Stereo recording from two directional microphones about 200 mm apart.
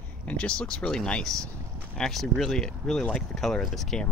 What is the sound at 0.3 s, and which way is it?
Speech, 5° left (ahead or behind).